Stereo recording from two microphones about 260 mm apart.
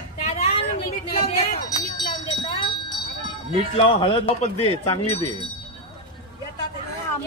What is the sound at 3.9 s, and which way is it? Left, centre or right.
Speech, centre.